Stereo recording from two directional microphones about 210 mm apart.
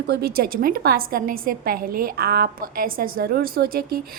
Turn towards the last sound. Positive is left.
turn(degrees=-45)  # may be behind; listen again after turning